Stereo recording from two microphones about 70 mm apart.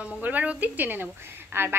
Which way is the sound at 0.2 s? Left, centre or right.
Right.